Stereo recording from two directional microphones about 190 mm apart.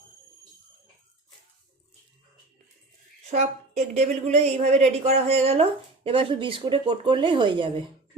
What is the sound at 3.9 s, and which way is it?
A woman's voice, 35° right (ahead or behind).